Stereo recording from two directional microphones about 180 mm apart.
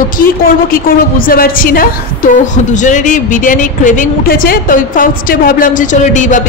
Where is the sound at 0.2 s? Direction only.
55° left (ahead or behind).